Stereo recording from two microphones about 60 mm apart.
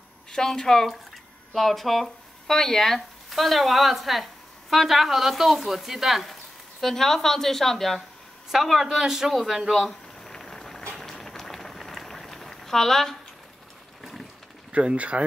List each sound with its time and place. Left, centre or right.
0.3 s a woman's voice: centre
9.6 s a sound: centre
14.7 s speech: centre